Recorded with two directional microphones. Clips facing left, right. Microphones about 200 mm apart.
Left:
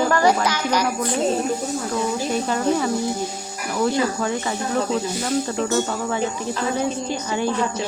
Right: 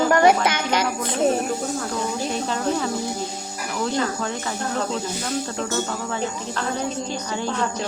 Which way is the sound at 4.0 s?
10° left (ahead or behind).